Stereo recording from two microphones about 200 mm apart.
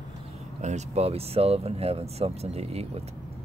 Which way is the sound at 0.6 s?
35° right (ahead or behind).